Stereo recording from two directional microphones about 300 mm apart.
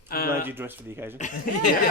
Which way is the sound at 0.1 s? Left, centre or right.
Left.